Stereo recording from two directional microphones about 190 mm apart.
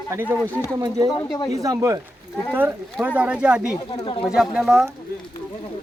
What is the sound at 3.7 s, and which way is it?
Speech, 25° left (ahead or behind).